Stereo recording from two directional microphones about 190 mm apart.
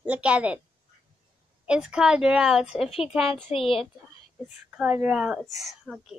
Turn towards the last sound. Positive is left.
turn(degrees=0)  # may be behind; listen again after turning